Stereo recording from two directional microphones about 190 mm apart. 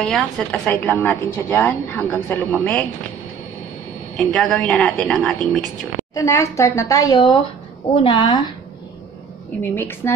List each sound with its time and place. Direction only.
0.0 s a woman's voice: 5° left (ahead or behind)
4.2 s a woman's voice: 5° left (ahead or behind)
6.1 s a woman's voice: 15° left (ahead or behind)
9.6 s a woman's voice: 10° left (ahead or behind)